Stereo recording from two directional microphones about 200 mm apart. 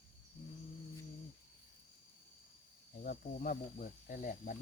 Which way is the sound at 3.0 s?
45° left (ahead or behind).